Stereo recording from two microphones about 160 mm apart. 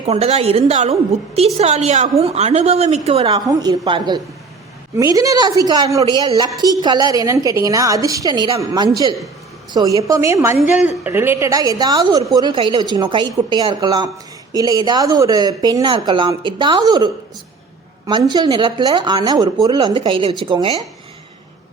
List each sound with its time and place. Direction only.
0.0 s a woman's voice: 40° right (ahead or behind)